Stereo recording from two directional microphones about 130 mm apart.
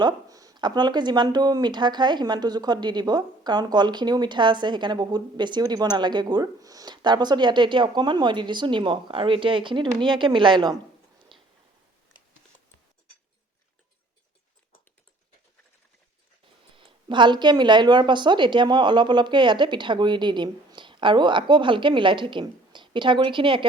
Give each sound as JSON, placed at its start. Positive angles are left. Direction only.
{"t": 0.0, "sound": "speech", "side_deg": -30}
{"t": 11.3, "sound": "a sound", "side_deg": -40}
{"t": 16.7, "sound": "speech", "side_deg": -40}